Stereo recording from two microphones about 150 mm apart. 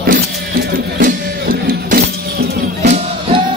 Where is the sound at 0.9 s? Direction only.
75° right (ahead or behind).